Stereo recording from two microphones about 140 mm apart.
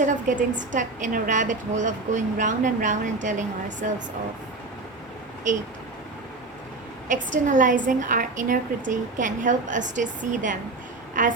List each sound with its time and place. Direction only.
0.0 s a woman's voice: 65° right (ahead or behind)
7.1 s a woman's voice: 65° right (ahead or behind)